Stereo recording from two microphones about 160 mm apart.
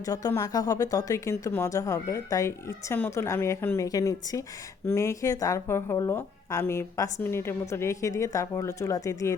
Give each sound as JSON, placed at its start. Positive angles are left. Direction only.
{"t": 0.0, "sound": "speech", "side_deg": 20}